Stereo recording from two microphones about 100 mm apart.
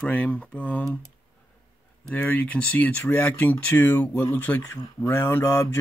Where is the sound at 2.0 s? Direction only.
15° left (ahead or behind).